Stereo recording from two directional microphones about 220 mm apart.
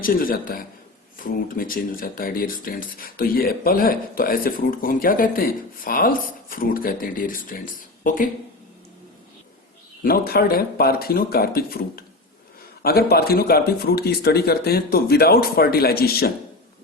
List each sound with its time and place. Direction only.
0.0 s speech: 40° left (ahead or behind)
10.0 s speech: 45° left (ahead or behind)